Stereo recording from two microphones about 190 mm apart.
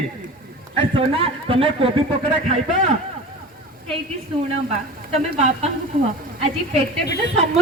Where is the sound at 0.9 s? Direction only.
30° right (ahead or behind).